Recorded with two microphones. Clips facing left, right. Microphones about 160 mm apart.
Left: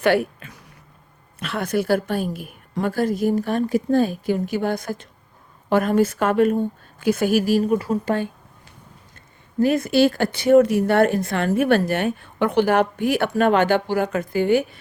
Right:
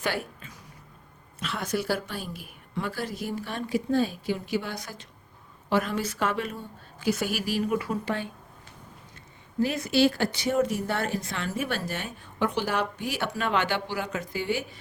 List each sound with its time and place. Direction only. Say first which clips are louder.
0.0 s a sound: left 12 dB; 65° left (ahead or behind)
1.4 s a woman's voice: left 7 dB; 60° left (ahead or behind)
9.6 s speech: left 6 dB; 50° left (ahead or behind)